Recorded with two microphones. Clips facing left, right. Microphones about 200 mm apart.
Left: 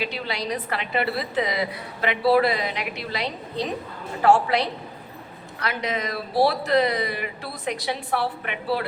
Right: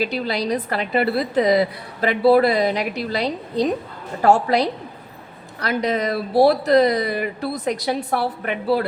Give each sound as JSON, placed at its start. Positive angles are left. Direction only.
{"t": 0.0, "sound": "a woman's voice", "side_deg": -40}